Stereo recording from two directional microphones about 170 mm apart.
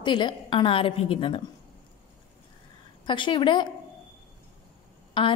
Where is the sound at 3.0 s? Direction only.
30° left (ahead or behind).